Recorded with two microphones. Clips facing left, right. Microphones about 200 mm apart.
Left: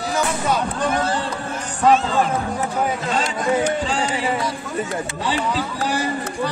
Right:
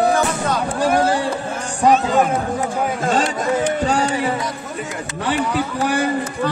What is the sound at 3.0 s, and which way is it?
Speech, 50° right (ahead or behind).